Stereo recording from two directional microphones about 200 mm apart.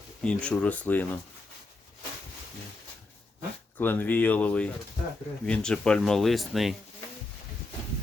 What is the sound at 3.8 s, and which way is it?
Speech, 10° left (ahead or behind).